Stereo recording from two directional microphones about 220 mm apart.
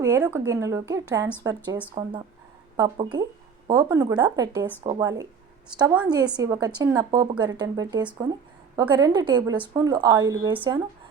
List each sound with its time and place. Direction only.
0.0 s speech: 15° right (ahead or behind)